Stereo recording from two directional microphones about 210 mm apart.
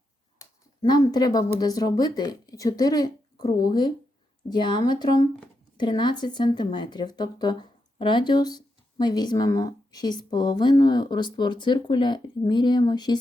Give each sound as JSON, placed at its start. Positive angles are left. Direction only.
{"t": 0.3, "sound": "speech", "side_deg": 20}